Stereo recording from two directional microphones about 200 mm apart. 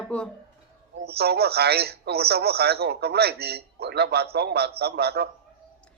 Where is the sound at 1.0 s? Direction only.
50° right (ahead or behind).